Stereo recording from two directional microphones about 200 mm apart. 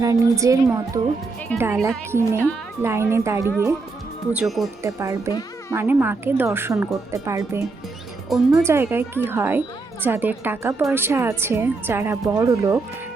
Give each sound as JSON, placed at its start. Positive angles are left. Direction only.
{"t": 0.0, "sound": "a woman's voice", "side_deg": -15}
{"t": 4.8, "sound": "a woman's voice", "side_deg": -15}
{"t": 5.3, "sound": "music", "side_deg": 20}
{"t": 5.7, "sound": "a woman's voice", "side_deg": -10}